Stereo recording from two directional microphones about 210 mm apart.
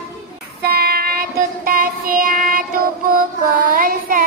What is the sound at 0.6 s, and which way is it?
Child singing, 50° right (ahead or behind).